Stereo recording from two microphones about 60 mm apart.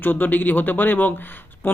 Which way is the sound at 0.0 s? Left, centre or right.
Left.